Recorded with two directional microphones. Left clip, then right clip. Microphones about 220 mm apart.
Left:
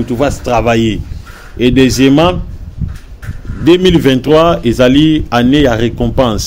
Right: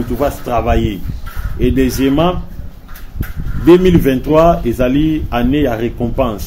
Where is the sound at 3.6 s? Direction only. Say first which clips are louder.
Left 1 dB; 45° left (ahead or behind).